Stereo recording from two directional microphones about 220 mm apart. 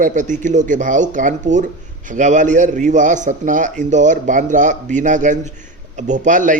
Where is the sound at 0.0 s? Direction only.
35° right (ahead or behind).